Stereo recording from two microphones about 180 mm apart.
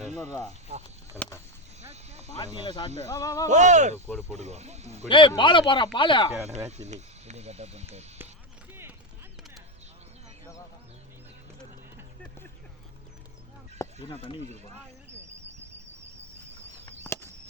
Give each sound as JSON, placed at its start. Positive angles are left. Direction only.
{"t": 0.7, "sound": "speech", "side_deg": -35}
{"t": 1.1, "sound": "a sound", "side_deg": 15}
{"t": 1.8, "sound": "snake", "side_deg": -35}
{"t": 2.6, "sound": "speech", "side_deg": 25}
{"t": 3.5, "sound": "speech", "side_deg": -40}
{"t": 4.1, "sound": "speech", "side_deg": 15}
{"t": 4.4, "sound": "speech", "side_deg": -40}
{"t": 5.0, "sound": "speech", "side_deg": 25}
{"t": 6.7, "sound": "speech", "side_deg": -40}
{"t": 14.0, "sound": "speech", "side_deg": 30}
{"t": 17.1, "sound": "a sound", "side_deg": 15}